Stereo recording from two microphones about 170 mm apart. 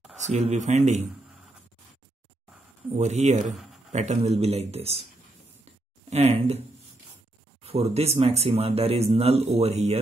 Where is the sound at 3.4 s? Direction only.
Centre (ahead or behind).